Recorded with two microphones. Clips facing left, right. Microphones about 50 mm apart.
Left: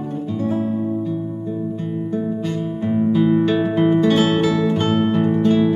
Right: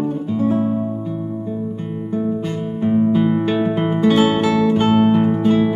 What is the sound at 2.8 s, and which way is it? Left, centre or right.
Music, centre.